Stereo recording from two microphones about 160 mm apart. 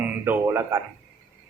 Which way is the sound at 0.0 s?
15° right (ahead or behind).